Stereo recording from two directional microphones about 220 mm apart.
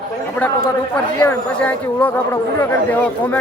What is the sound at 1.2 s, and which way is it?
Speech, 5° left (ahead or behind).